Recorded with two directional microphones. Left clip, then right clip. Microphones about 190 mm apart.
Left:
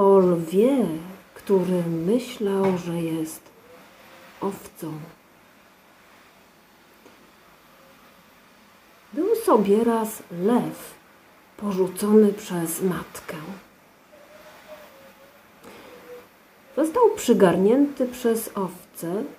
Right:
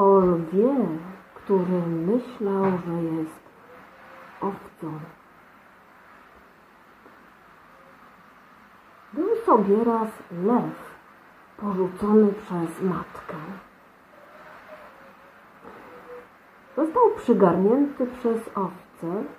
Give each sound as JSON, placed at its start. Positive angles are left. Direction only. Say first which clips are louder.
{"t": 0.0, "sound": "a sound", "louder": "left 1 dB", "side_deg": 25}
{"t": 1.5, "sound": "a woman's voice", "louder": "left 2 dB", "side_deg": 20}
{"t": 4.4, "sound": "a woman's voice", "louder": "even", "side_deg": 20}
{"t": 9.2, "sound": "a woman's voice", "louder": "even", "side_deg": 20}
{"t": 11.6, "sound": "a woman's voice", "louder": "left 1 dB", "side_deg": 20}
{"t": 16.7, "sound": "a woman's voice", "louder": "left 1 dB", "side_deg": 20}